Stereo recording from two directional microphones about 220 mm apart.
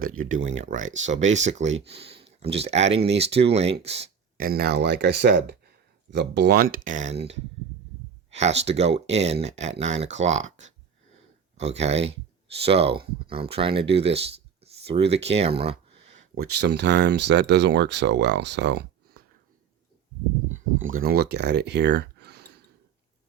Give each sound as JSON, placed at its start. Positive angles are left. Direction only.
{"t": 0.0, "sound": "speech", "side_deg": -70}
{"t": 0.3, "sound": "speech", "side_deg": -35}
{"t": 0.8, "sound": "speech", "side_deg": -60}
{"t": 1.3, "sound": "speech", "side_deg": -30}
{"t": 1.6, "sound": "speech", "side_deg": -55}
{"t": 2.0, "sound": "a sound", "side_deg": -25}
{"t": 2.6, "sound": "speech", "side_deg": -30}
{"t": 4.4, "sound": "speech", "side_deg": -45}
{"t": 6.8, "sound": "speech", "side_deg": -35}
{"t": 8.3, "sound": "speech", "side_deg": -30}
{"t": 11.8, "sound": "speech", "side_deg": -30}
{"t": 16.3, "sound": "speech", "side_deg": -50}
{"t": 20.9, "sound": "speech", "side_deg": -45}